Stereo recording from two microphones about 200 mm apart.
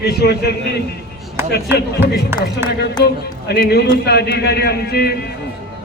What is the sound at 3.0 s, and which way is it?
A man's voice, 55° left (ahead or behind).